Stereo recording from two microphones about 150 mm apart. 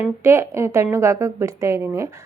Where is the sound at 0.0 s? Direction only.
15° right (ahead or behind).